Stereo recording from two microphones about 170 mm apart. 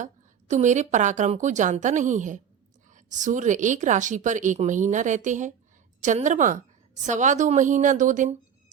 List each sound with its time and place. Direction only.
0.0 s a woman's voice: 45° right (ahead or behind)